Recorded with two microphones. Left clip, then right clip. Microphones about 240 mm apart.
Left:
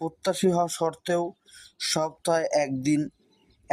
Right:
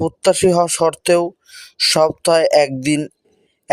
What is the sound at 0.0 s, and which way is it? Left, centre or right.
Speech, right.